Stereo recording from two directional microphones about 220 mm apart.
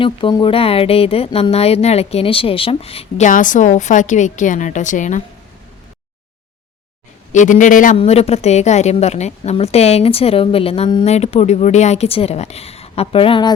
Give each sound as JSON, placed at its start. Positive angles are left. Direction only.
{"t": 0.0, "sound": "a woman's voice", "side_deg": 20}
{"t": 7.3, "sound": "a man's voice", "side_deg": 35}